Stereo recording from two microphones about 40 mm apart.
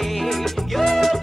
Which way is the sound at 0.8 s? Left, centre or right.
Centre.